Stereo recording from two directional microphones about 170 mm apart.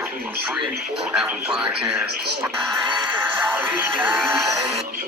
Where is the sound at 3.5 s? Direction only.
10° right (ahead or behind).